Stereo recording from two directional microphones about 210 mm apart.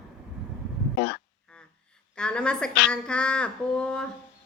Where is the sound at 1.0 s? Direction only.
55° left (ahead or behind).